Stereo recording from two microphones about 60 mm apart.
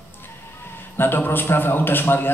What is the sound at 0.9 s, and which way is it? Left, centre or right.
A man's voice, left.